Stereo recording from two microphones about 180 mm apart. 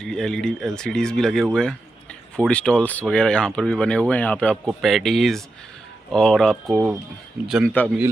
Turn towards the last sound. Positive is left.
turn(degrees=10)  # may be behind; listen again after turning